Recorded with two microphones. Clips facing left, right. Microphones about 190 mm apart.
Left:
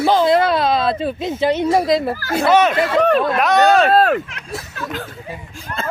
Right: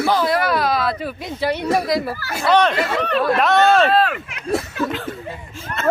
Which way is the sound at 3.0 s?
45° left (ahead or behind).